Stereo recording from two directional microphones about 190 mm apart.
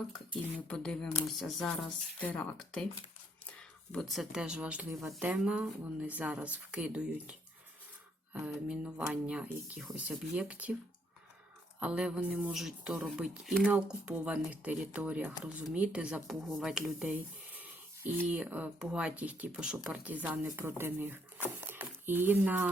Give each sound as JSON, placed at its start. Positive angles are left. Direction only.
{"t": 0.7, "sound": "speech", "side_deg": 5}
{"t": 3.9, "sound": "speech", "side_deg": 0}
{"t": 11.8, "sound": "speech", "side_deg": -5}
{"t": 21.6, "sound": "a sound", "side_deg": -10}